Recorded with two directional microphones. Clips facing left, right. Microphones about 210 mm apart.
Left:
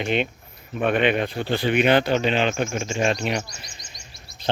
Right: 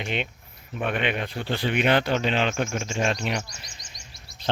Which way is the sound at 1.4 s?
35° left (ahead or behind).